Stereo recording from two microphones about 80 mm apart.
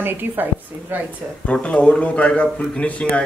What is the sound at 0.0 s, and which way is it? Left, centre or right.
Speech, right.